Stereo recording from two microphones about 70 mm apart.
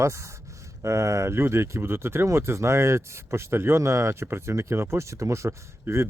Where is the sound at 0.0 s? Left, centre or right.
Right.